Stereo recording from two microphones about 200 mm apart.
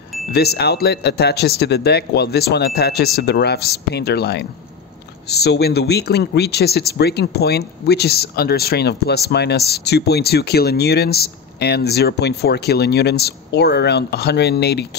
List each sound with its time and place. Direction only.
0.3 s speech: 55° left (ahead or behind)